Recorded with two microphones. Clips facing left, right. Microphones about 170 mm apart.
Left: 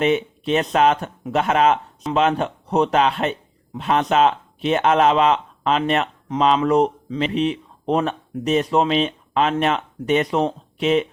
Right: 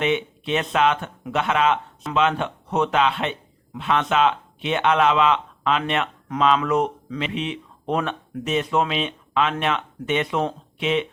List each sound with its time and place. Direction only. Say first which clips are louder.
0.0 s speech: left 4 dB; 40° left (ahead or behind)